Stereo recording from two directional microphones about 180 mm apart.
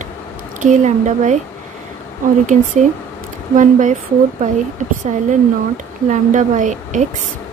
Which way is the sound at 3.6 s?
45° right (ahead or behind).